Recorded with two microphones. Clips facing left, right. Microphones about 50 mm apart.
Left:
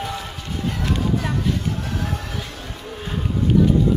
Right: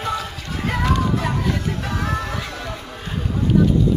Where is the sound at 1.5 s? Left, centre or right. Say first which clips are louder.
Right 1 dB; right.